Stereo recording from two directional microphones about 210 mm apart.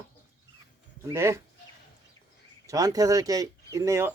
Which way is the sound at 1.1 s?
10° right (ahead or behind).